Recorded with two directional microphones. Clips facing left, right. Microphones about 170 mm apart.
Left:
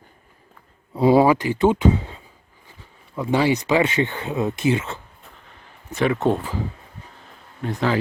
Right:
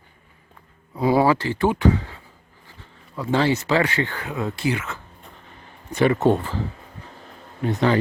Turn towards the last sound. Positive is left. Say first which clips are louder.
# right 2 dB
turn(degrees=0)  # may be behind; listen again after turning